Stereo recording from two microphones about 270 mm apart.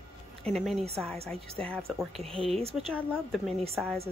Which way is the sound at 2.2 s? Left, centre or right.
Right.